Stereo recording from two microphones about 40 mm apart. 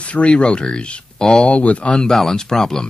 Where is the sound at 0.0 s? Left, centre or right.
Left.